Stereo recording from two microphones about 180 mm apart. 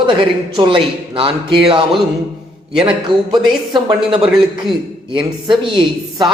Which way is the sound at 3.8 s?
30° right (ahead or behind).